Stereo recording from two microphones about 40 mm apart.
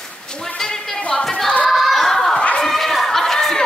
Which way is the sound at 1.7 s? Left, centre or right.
Centre.